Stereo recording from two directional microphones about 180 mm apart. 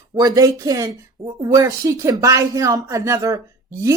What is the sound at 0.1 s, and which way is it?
Speech, 20° right (ahead or behind).